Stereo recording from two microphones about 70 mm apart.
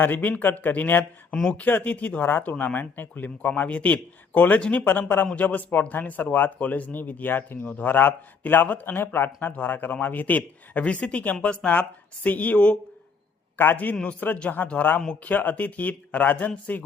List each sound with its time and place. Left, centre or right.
0.0 s speech: left